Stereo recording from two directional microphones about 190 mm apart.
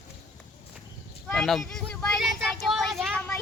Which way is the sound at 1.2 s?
Centre (ahead or behind).